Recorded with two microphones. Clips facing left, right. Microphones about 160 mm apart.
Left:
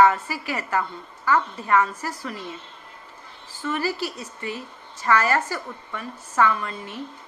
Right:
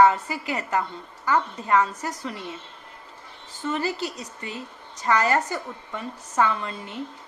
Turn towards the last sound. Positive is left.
turn(degrees=-25)  # may be behind; listen again after turning